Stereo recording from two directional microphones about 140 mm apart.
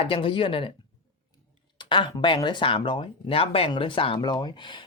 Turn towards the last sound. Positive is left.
turn(degrees=35)  # may be behind; listen again after turning